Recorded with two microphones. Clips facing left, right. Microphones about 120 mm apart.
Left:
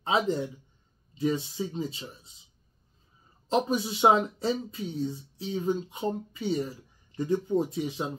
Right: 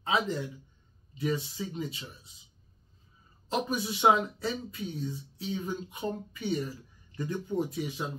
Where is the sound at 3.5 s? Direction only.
25° left (ahead or behind).